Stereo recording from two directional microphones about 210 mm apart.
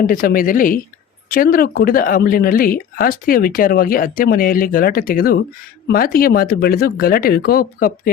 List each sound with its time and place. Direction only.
0.0 s speech: 40° left (ahead or behind)